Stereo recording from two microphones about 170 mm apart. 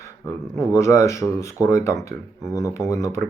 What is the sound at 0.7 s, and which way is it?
Speech, 15° left (ahead or behind).